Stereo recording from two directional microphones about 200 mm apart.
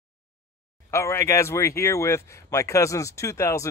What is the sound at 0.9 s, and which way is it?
Speech, 15° left (ahead or behind).